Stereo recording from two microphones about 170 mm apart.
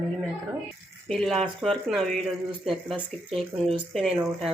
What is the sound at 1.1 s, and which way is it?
Speech, 5° left (ahead or behind).